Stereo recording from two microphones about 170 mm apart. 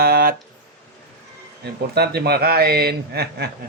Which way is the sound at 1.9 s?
70° right (ahead or behind).